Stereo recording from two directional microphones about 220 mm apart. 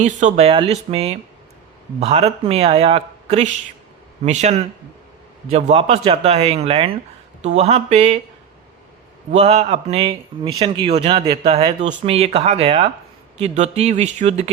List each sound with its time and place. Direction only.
0.0 s speech: 30° right (ahead or behind)
9.3 s speech: 30° right (ahead or behind)